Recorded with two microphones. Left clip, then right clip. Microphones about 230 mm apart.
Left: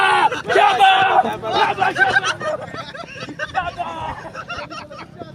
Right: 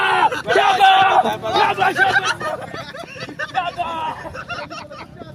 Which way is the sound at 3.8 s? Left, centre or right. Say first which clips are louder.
Right 3 dB; right.